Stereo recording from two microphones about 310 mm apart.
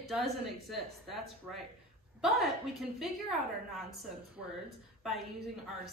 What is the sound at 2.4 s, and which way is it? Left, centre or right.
Speech, centre.